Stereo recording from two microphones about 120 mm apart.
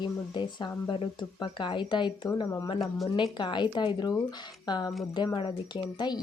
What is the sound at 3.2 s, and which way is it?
Speech, 40° left (ahead or behind).